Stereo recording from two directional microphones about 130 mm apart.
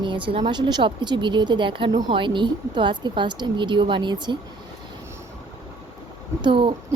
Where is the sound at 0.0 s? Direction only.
40° right (ahead or behind).